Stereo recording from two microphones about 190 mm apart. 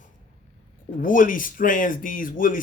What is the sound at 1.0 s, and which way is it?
A man's voice, 45° left (ahead or behind).